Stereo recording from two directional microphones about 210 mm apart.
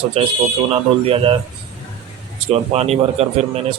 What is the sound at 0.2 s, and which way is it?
A man's voice, 30° right (ahead or behind).